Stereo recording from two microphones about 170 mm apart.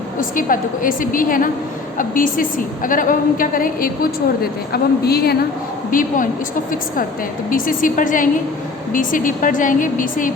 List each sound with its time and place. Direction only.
0.2 s a woman's voice: 55° left (ahead or behind)
5.9 s a woman's voice: 55° left (ahead or behind)
7.5 s a woman's voice: 55° left (ahead or behind)